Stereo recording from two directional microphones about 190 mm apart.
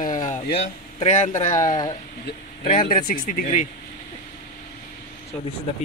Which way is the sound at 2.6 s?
45° left (ahead or behind).